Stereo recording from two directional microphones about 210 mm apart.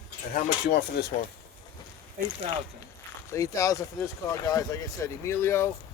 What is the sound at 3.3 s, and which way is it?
Speech, 15° left (ahead or behind).